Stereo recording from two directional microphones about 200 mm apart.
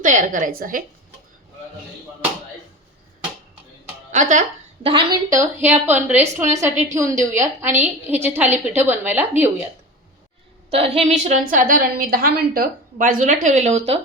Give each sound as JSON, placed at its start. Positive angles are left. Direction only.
{"t": 0.0, "sound": "a woman's voice", "side_deg": -40}
{"t": 4.1, "sound": "a woman's voice", "side_deg": -40}
{"t": 4.9, "sound": "a woman's voice", "side_deg": -20}
{"t": 10.7, "sound": "a woman's voice", "side_deg": -30}